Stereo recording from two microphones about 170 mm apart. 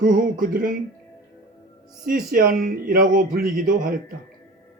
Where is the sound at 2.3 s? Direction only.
55° right (ahead or behind).